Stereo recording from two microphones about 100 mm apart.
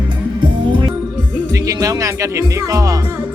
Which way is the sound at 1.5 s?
35° right (ahead or behind).